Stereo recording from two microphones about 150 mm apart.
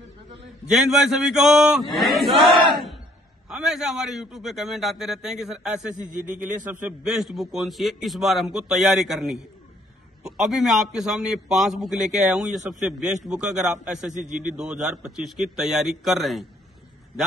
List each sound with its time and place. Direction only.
0.7 s a man's voice: centre (ahead or behind)
5.9 s a man's voice: 60° right (ahead or behind)
6.4 s a man's voice: 10° right (ahead or behind)